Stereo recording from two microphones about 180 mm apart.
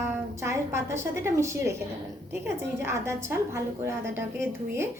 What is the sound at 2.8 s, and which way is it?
Speech, 15° right (ahead or behind).